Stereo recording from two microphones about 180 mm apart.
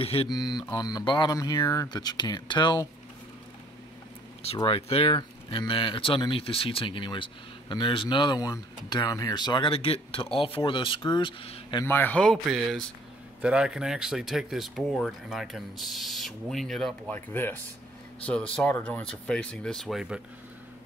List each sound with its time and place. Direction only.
0.0 s mantra: 35° left (ahead or behind)
0.3 s speech: 20° left (ahead or behind)
4.6 s speech: 30° left (ahead or behind)
11.8 s speech: 10° left (ahead or behind)